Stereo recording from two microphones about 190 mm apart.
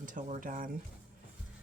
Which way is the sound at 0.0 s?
45° right (ahead or behind).